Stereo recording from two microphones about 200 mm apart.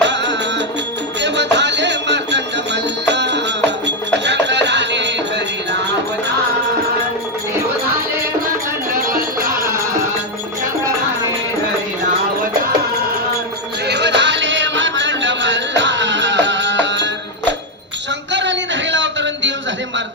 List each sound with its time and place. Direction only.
0.0 s music: 60° right (ahead or behind)
1.5 s music: 60° right (ahead or behind)
8.9 s music: 45° right (ahead or behind)
13.8 s music: 60° right (ahead or behind)
18.3 s a sound: 65° right (ahead or behind)